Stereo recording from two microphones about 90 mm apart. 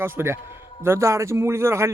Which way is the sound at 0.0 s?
25° right (ahead or behind).